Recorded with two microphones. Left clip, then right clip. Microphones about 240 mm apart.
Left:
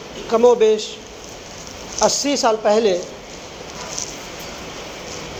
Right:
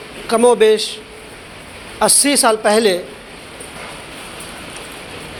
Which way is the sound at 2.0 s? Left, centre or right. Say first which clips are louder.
Right 3 dB; right.